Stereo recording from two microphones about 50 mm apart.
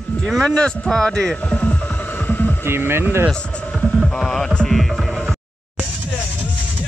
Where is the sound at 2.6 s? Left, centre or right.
Right.